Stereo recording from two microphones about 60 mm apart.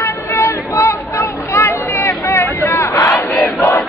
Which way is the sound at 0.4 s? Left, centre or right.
Left.